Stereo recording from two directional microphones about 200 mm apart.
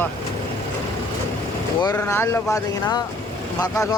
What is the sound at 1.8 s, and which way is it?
Speech, 15° left (ahead or behind).